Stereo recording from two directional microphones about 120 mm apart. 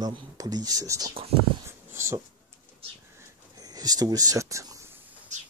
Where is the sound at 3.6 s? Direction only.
30° right (ahead or behind).